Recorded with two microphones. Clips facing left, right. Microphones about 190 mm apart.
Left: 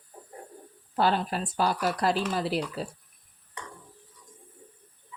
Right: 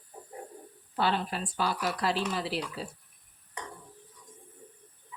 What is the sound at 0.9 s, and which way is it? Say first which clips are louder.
Speech: left 4 dB; 45° left (ahead or behind).